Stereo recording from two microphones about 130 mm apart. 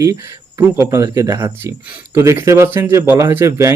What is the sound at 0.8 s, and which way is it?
A man's voice, 20° right (ahead or behind).